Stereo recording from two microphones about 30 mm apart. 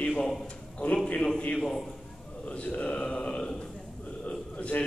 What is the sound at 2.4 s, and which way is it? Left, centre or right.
A man's voice, left.